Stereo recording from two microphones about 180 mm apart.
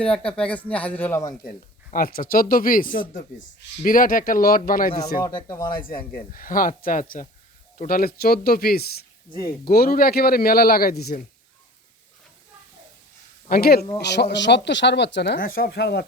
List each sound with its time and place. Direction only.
0.0 s speech: 5° left (ahead or behind)
1.5 s speech: 55° left (ahead or behind)
5.2 s speech: 20° left (ahead or behind)
6.3 s speech: 50° left (ahead or behind)
13.5 s speech: 60° left (ahead or behind)
14.0 s speech: 70° left (ahead or behind)